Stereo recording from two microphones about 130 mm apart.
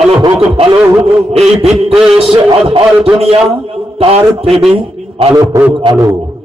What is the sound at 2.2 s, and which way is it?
A man's voice, 40° right (ahead or behind).